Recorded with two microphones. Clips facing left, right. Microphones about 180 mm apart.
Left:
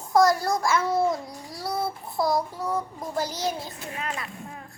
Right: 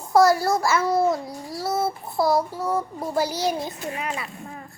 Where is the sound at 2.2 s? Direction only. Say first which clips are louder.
Right 4 dB; 5° right (ahead or behind).